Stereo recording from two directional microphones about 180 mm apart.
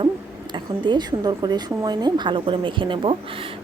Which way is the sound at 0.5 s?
25° right (ahead or behind).